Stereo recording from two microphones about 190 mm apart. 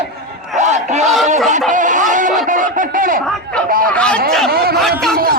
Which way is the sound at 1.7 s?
45° right (ahead or behind).